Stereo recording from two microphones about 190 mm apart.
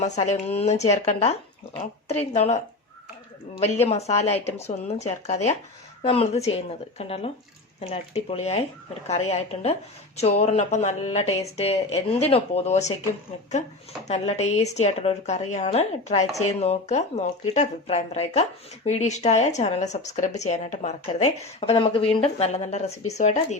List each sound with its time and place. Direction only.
0.0 s a woman's voice: 35° left (ahead or behind)
3.8 s a woman's voice: 35° left (ahead or behind)
14.1 s a woman's voice: 35° left (ahead or behind)